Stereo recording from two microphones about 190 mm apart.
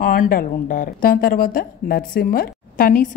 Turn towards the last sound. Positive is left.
turn(degrees=45)  # may be behind; listen again after turning